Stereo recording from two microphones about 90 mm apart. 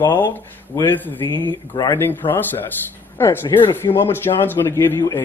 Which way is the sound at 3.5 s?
65° left (ahead or behind).